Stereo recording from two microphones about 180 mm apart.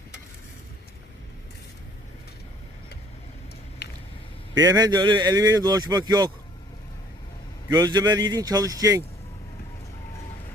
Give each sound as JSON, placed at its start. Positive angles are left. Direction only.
{"t": 3.8, "sound": "a sound", "side_deg": 70}
{"t": 4.5, "sound": "a man's voice", "side_deg": -20}
{"t": 7.7, "sound": "a man's voice", "side_deg": -20}